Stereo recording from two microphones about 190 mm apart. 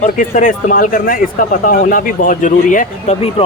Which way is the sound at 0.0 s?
40° left (ahead or behind).